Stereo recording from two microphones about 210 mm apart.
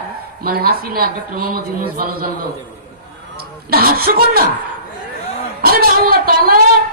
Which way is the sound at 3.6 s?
45° right (ahead or behind).